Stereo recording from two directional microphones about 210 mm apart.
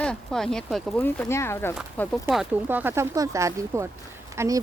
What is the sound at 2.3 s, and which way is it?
A woman's voice, 5° right (ahead or behind).